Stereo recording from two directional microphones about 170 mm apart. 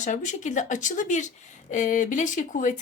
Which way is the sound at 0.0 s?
45° left (ahead or behind).